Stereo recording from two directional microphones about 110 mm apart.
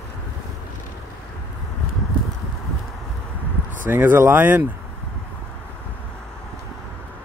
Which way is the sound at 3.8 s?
20° right (ahead or behind).